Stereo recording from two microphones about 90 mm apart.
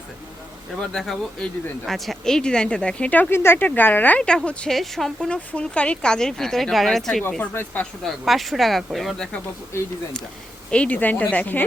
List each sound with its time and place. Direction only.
0.7 s speech: centre (ahead or behind); by 4.2 s 20° left (ahead or behind)
4.2 s speech: 10° left (ahead or behind)
7.3 s speech: 20° left (ahead or behind)
8.0 s speech: centre (ahead or behind)
10.7 s speech: 15° left (ahead or behind)